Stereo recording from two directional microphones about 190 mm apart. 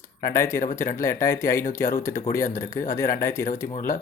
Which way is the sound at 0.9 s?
15° left (ahead or behind).